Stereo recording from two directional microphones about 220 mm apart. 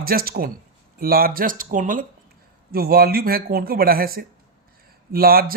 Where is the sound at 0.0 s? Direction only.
40° right (ahead or behind).